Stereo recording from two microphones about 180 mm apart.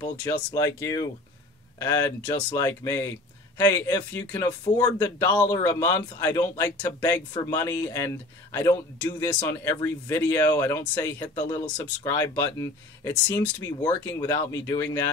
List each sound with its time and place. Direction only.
0.0 s speech: 20° left (ahead or behind)